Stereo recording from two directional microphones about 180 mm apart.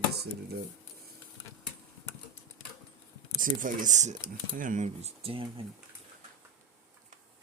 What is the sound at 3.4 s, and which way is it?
Speech, 50° right (ahead or behind).